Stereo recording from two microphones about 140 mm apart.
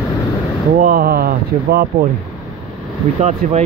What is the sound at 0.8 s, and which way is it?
Speech, 90° right.